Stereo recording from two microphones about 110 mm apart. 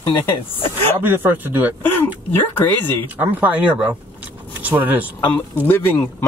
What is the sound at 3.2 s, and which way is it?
Speech, 15° right (ahead or behind).